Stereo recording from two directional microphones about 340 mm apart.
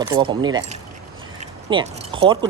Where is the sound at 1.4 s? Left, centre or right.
Centre.